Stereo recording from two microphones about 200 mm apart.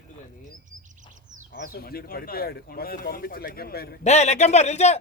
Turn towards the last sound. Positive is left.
turn(degrees=35)  # may be behind; listen again after turning